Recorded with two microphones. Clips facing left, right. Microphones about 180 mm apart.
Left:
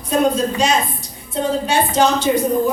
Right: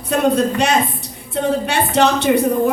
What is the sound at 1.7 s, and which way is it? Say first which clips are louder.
Speech: left 1 dB; 65° right (ahead or behind).